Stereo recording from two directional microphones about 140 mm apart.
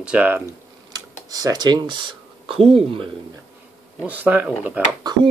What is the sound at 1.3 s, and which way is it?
Speech, 25° right (ahead or behind).